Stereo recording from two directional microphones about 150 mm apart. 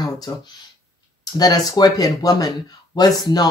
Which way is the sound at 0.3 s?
25° left (ahead or behind).